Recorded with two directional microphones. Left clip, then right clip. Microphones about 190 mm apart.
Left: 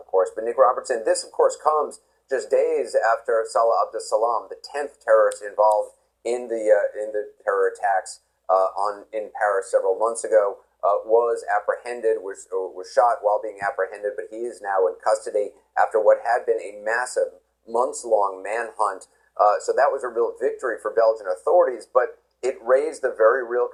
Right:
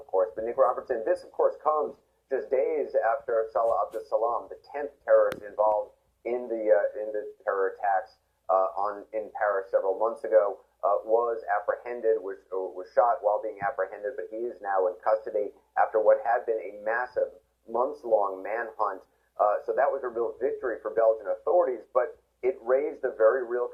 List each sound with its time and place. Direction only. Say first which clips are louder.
0.1 s speech: left 5 dB; 25° left (ahead or behind)